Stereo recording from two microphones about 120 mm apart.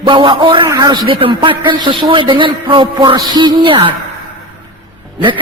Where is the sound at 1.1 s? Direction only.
45° right (ahead or behind).